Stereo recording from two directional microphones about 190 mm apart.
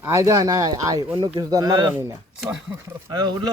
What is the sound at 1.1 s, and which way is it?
Speech, 30° right (ahead or behind).